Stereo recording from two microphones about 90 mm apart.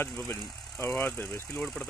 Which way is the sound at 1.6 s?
10° left (ahead or behind).